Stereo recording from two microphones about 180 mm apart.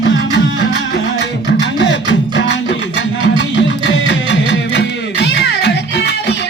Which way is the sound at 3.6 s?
80° left.